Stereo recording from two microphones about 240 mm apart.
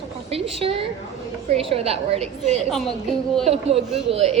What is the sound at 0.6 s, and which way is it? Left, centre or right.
A woman's voice, right.